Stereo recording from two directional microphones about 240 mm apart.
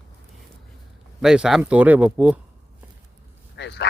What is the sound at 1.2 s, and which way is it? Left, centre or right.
Speech, centre.